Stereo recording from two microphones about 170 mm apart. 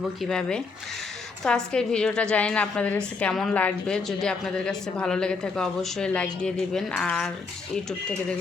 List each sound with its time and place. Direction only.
0.2 s a woman's voice: 5° left (ahead or behind)